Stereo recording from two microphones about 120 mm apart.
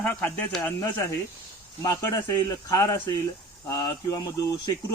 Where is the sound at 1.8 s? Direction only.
30° left (ahead or behind).